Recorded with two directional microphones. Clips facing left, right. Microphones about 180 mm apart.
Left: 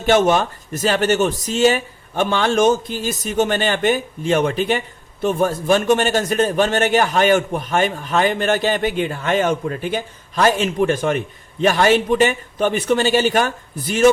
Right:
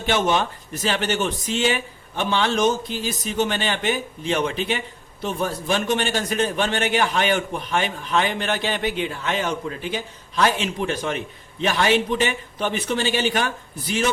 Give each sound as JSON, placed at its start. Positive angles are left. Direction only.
{"t": 0.0, "sound": "a man's voice", "side_deg": 45}